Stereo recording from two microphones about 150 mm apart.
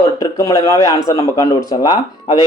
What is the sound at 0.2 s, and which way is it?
A man's voice, 25° left (ahead or behind).